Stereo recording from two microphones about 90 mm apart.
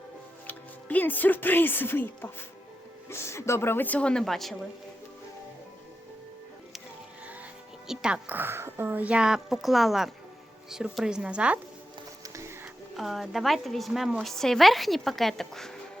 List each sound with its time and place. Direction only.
0.4 s a woman's voice: 20° left (ahead or behind); by 4.5 s 5° left (ahead or behind)
7.9 s speech: 10° right (ahead or behind)
8.4 s speech: 25° right (ahead or behind)
12.2 s music: 35° right (ahead or behind)
13.0 s a woman's voice: centre (ahead or behind)